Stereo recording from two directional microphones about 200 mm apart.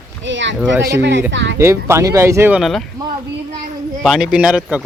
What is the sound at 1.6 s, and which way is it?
Speech, 15° right (ahead or behind).